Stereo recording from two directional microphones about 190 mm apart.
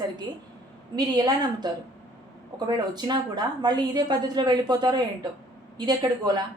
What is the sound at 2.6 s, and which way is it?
A woman's voice, 20° right (ahead or behind).